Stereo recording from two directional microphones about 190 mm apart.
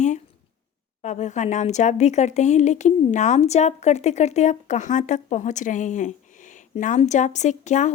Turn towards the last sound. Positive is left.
turn(degrees=40)  # may be behind; listen again after turning